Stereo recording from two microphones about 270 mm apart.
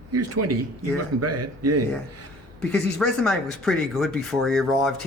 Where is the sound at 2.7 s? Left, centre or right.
Centre.